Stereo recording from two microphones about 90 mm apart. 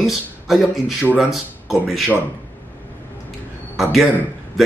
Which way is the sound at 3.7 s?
Centre (ahead or behind).